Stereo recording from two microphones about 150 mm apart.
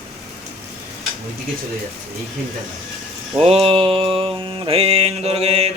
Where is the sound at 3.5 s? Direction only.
40° right (ahead or behind).